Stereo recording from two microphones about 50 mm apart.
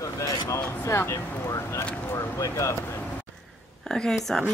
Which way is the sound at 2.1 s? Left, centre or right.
Left.